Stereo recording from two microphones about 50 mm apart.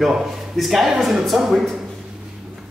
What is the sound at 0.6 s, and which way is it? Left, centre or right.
Speech, centre.